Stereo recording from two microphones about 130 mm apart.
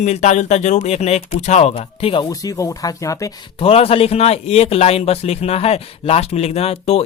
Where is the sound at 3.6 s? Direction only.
50° left (ahead or behind).